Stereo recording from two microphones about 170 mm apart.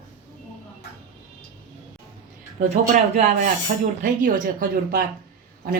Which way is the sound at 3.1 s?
50° right (ahead or behind).